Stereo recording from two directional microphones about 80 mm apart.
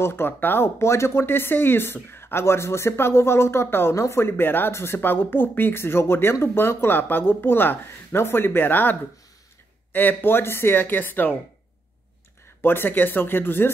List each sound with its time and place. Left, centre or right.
0.0 s speech: left
9.9 s speech: left
12.6 s speech: left